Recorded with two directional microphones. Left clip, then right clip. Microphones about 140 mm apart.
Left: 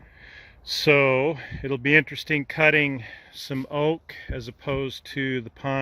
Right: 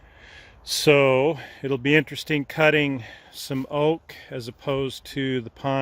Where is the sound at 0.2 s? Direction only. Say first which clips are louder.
Even; 15° right (ahead or behind).